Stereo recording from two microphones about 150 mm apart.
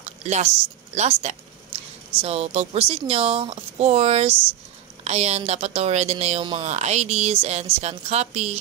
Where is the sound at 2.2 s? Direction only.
45° right (ahead or behind).